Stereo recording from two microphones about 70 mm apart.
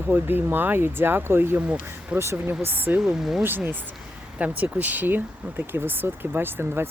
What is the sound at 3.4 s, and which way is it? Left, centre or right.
A woman's voice, right.